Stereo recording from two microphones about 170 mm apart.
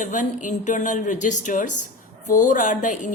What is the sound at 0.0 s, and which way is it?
Speech, 50° left (ahead or behind).